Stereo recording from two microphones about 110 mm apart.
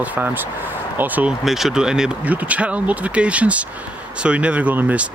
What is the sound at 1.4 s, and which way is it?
Speech, centre (ahead or behind).